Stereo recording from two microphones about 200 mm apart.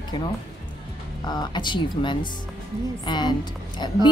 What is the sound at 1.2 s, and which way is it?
Speech, 20° left (ahead or behind).